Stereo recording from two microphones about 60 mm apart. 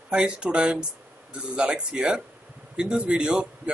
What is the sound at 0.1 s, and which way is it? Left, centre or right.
A man's voice, centre.